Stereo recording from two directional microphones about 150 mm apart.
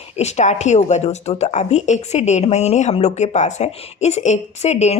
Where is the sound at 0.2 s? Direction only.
50° left (ahead or behind).